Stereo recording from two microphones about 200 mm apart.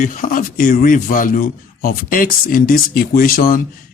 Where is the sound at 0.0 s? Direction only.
45° left (ahead or behind).